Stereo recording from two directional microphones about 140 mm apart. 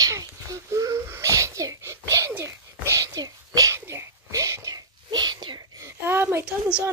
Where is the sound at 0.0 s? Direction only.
25° right (ahead or behind).